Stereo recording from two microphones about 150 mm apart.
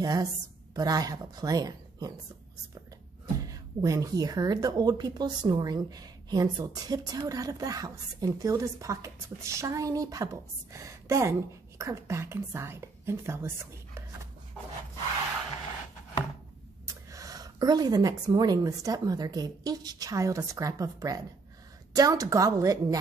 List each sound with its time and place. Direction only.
0.0 s speech: 25° right (ahead or behind)
3.3 s speech: 25° right (ahead or behind)
17.1 s speech: 25° right (ahead or behind)